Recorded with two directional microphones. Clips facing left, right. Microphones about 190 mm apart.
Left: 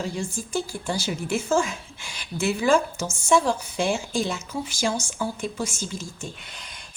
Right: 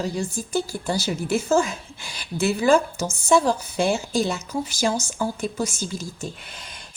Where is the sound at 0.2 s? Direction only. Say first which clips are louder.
Right 3 dB; 40° right (ahead or behind).